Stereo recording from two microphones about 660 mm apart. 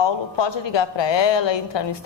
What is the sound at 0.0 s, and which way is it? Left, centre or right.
A woman's voice, left.